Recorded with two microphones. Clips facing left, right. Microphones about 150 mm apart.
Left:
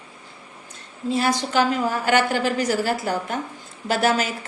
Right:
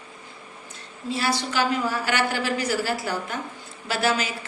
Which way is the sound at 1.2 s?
45° left (ahead or behind).